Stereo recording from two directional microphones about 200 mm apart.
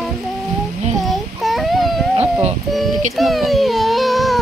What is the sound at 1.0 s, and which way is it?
Baby cry, centre (ahead or behind).